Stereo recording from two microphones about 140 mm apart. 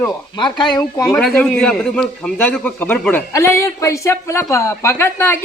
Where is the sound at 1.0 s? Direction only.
5° left (ahead or behind).